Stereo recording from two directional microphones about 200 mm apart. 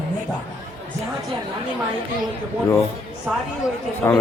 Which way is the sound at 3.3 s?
5° right (ahead or behind).